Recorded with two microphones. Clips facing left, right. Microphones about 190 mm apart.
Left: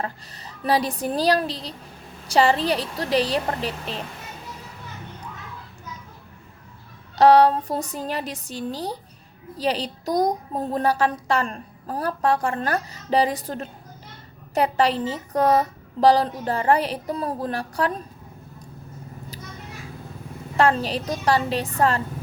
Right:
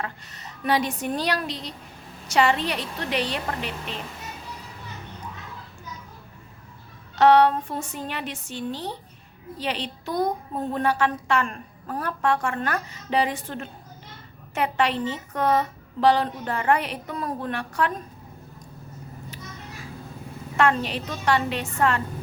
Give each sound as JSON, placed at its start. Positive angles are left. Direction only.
{"t": 0.0, "sound": "a child's voice", "side_deg": 35}
{"t": 7.2, "sound": "a child's voice", "side_deg": 35}
{"t": 20.6, "sound": "a child's voice", "side_deg": 35}